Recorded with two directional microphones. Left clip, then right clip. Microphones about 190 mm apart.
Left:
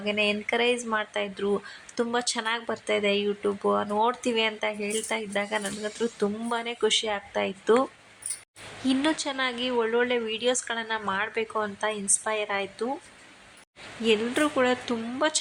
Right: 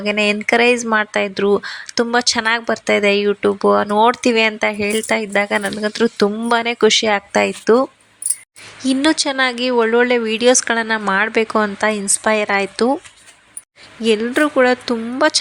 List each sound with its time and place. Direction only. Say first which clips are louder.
0.0 s speech: right 9 dB; 35° right (ahead or behind)
14.0 s speech: right 9 dB; 30° right (ahead or behind)